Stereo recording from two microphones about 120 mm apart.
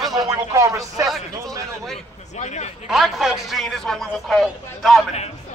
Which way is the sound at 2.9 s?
5° right (ahead or behind).